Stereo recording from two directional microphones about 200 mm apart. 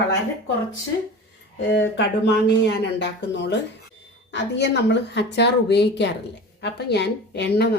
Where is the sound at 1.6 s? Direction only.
65° left (ahead or behind).